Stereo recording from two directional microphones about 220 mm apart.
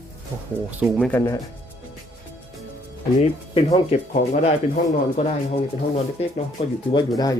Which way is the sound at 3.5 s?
30° left (ahead or behind).